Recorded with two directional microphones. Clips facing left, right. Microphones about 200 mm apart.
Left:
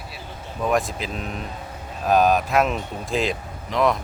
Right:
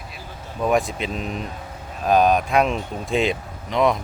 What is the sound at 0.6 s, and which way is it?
Speech, centre (ahead or behind).